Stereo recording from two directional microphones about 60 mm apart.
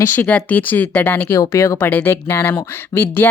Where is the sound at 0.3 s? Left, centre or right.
Left.